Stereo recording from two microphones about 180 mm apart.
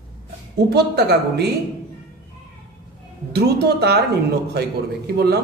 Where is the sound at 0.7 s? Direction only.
65° right (ahead or behind).